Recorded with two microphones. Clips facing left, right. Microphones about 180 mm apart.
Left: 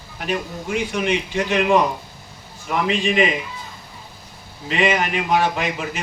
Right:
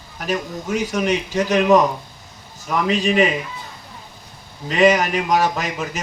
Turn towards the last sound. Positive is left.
turn(degrees=-40)  # may be behind; listen again after turning